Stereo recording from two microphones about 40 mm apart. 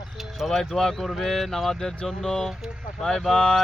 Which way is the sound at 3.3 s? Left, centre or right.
Centre.